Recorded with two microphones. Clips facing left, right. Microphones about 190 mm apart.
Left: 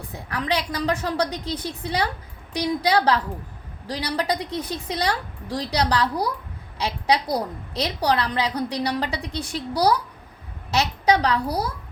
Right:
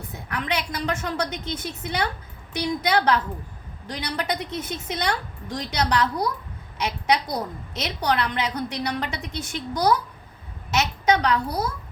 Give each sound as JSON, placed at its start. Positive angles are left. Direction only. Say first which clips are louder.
{"t": 0.1, "sound": "a woman's voice", "louder": "left 3 dB", "side_deg": 35}